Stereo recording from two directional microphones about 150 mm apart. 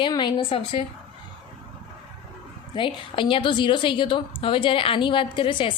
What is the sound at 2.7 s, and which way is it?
Speech, 35° left (ahead or behind).